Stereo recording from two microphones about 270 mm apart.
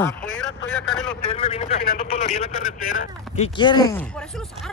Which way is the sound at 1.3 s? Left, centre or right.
Left.